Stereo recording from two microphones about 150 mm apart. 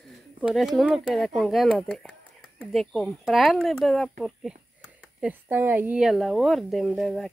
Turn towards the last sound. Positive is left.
turn(degrees=0)  # may be behind; listen again after turning